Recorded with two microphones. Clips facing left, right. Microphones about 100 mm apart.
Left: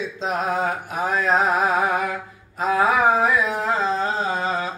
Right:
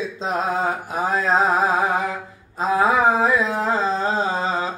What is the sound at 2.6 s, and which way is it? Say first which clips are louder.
Carnatic music: right 1 dB; 30° right (ahead or behind).